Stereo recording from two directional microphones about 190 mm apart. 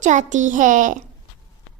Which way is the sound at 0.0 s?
40° right (ahead or behind).